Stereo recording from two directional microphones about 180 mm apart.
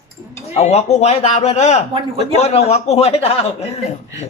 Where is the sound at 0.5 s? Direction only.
35° left (ahead or behind).